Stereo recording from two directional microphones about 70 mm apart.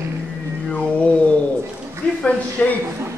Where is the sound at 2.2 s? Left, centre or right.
Left.